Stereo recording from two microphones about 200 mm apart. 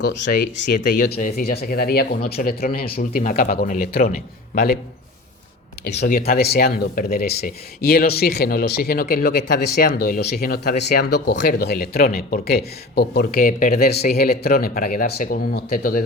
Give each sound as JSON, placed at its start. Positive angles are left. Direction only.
{"t": 0.0, "sound": "speech", "side_deg": 60}
{"t": 0.8, "sound": "speech", "side_deg": 40}
{"t": 6.3, "sound": "speech", "side_deg": 50}